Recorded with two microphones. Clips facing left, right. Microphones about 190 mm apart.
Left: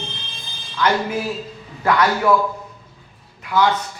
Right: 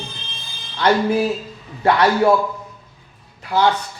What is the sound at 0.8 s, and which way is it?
A man's voice, 35° right (ahead or behind).